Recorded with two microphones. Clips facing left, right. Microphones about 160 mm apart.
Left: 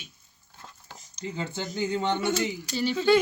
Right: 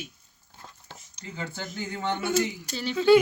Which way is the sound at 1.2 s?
20° left (ahead or behind).